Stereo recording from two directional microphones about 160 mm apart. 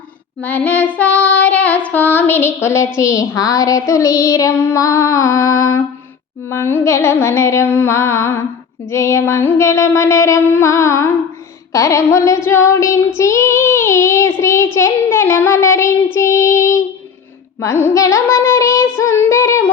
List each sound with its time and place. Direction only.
0.4 s child singing: 10° left (ahead or behind)